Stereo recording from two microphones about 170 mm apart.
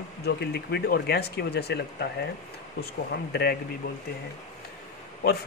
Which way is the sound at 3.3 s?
70° left (ahead or behind).